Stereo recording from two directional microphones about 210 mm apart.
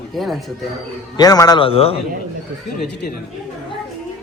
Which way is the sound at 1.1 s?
20° left (ahead or behind).